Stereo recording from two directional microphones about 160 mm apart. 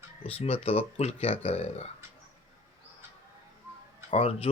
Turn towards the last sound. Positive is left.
turn(degrees=40)  # may be behind; listen again after turning